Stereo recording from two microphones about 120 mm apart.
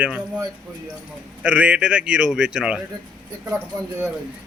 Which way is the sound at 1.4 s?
10° right (ahead or behind).